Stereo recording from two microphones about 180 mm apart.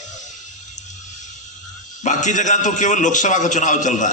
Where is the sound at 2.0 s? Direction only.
40° left (ahead or behind).